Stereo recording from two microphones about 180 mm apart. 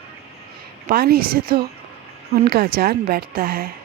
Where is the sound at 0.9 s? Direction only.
60° right (ahead or behind).